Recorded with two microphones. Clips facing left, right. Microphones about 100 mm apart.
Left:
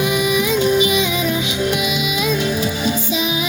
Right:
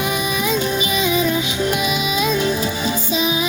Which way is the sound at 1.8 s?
35° right (ahead or behind).